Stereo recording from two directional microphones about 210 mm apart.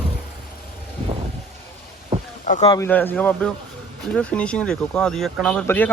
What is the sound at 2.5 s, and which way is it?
Speech, 30° left (ahead or behind).